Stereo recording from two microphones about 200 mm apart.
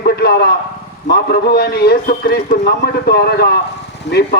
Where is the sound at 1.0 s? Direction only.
55° left (ahead or behind).